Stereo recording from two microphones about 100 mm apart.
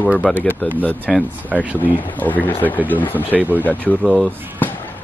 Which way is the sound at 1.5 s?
15° right (ahead or behind).